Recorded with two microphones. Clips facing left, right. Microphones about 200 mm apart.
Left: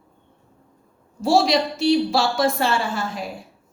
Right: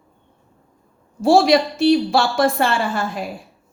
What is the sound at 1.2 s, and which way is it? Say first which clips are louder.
A woman's voice: right 4 dB; 55° right (ahead or behind).